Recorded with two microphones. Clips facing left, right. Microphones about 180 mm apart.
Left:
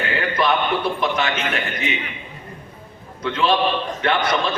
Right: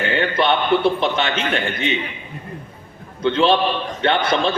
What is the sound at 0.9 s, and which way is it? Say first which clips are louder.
A man's voice: right 1 dB; 30° right (ahead or behind).